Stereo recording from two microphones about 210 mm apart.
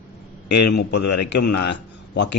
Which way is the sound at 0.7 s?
50° left (ahead or behind).